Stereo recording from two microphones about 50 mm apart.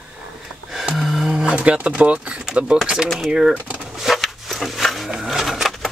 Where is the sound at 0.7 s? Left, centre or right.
Centre; by 2.4 s right.